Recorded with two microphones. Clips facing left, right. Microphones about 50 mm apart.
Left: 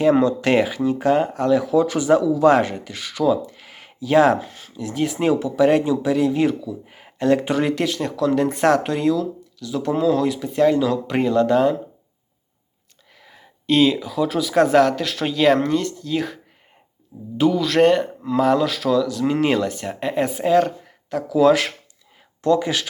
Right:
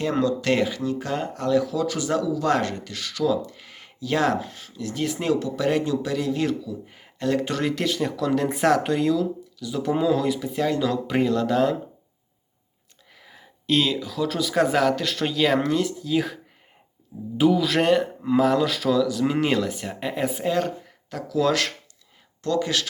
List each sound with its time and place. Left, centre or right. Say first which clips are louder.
0.2 s speech: left 4 dB; left
1.6 s speech: left 7 dB; left
3.6 s speech: left 2 dB; centre
7.7 s speech: left 2 dB; centre
13.1 s speech: left 1 dB; centre